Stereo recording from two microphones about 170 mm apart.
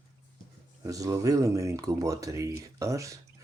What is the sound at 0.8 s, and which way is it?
Speech, 20° right (ahead or behind).